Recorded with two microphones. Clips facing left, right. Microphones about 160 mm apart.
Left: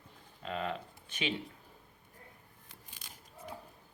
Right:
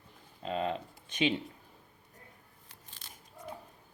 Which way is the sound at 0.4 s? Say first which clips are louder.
Right 4 dB; 25° right (ahead or behind).